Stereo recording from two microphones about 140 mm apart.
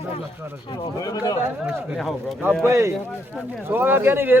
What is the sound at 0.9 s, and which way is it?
Speech, 25° left (ahead or behind).